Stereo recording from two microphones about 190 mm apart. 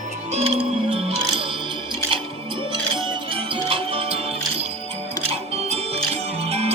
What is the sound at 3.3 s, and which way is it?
Music, 30° right (ahead or behind).